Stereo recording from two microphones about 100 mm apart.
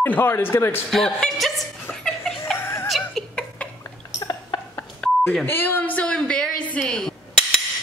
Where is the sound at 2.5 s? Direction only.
20° left (ahead or behind).